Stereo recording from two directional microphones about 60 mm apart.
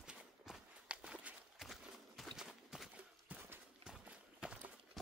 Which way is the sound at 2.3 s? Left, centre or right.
Centre.